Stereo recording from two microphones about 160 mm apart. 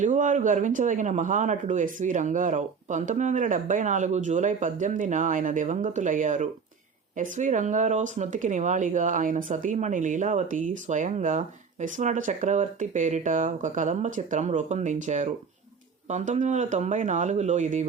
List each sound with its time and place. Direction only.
0.0 s speech: 50° right (ahead or behind)